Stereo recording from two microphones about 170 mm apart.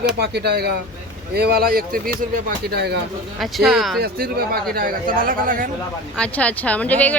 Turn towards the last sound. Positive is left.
turn(degrees=10)  # may be behind; listen again after turning